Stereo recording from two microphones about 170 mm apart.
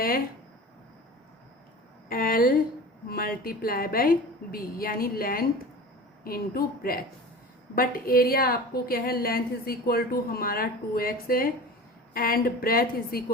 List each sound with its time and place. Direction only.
2.0 s a woman's voice: 55° left (ahead or behind)